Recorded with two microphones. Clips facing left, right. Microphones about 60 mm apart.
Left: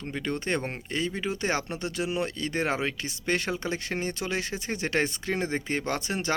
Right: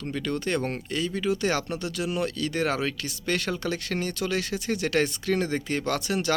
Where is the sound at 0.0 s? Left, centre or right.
Left.